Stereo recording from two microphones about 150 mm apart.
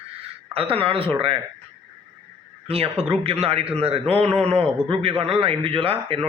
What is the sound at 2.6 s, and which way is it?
A man's voice, 40° right (ahead or behind).